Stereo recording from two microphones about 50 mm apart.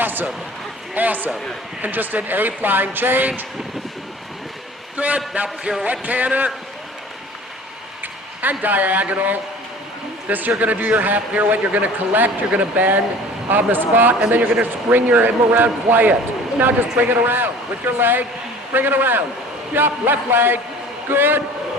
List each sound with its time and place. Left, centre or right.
0.0 s a sound: right
0.9 s a man's voice: right
4.9 s a man's voice: right
8.4 s a man's voice: right